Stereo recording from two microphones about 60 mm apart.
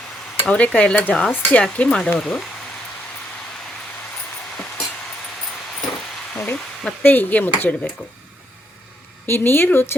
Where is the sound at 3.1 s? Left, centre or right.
Centre.